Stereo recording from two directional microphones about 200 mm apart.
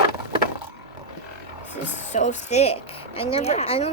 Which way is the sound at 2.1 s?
35° left (ahead or behind).